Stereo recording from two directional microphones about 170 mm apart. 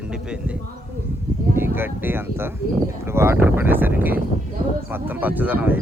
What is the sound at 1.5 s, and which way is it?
Speech, 15° right (ahead or behind).